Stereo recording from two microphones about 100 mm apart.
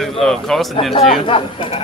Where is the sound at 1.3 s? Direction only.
65° left (ahead or behind).